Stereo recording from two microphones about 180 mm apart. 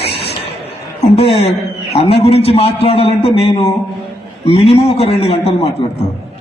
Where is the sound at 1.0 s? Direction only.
35° left (ahead or behind).